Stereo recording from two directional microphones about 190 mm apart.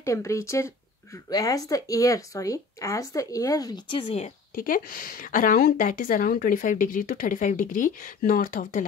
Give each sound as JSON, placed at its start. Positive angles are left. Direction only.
{"t": 0.0, "sound": "speech", "side_deg": 15}